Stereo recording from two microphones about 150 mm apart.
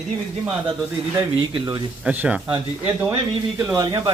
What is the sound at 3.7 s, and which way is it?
Speech, 25° right (ahead or behind).